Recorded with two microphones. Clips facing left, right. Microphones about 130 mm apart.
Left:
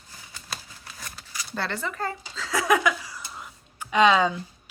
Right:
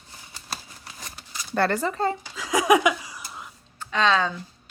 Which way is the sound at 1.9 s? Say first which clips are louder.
Right 6 dB; 25° right (ahead or behind).